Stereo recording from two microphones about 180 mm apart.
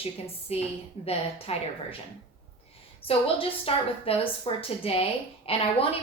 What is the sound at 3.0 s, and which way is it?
A woman's voice, 30° left (ahead or behind).